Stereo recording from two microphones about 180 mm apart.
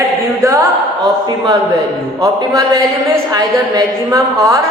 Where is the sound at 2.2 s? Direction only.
20° right (ahead or behind).